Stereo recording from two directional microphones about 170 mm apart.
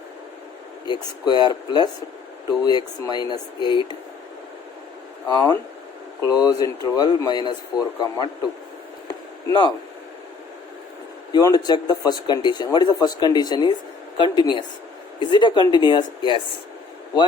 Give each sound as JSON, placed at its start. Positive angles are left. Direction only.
{"t": 0.9, "sound": "speech", "side_deg": 25}
{"t": 5.3, "sound": "speech", "side_deg": 25}
{"t": 9.5, "sound": "speech", "side_deg": 25}
{"t": 11.3, "sound": "speech", "side_deg": 20}